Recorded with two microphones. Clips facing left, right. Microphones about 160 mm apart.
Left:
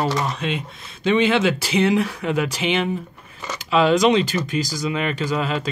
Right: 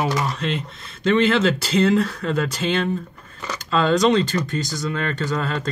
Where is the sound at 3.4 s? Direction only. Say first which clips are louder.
Left 3 dB; 5° left (ahead or behind).